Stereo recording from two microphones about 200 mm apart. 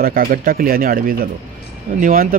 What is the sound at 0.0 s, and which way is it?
Speech, 45° right (ahead or behind).